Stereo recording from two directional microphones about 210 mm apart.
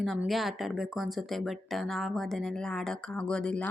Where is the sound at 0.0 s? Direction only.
Centre (ahead or behind).